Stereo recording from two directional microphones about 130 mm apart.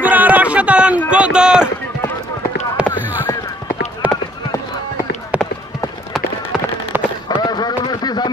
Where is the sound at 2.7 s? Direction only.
15° right (ahead or behind).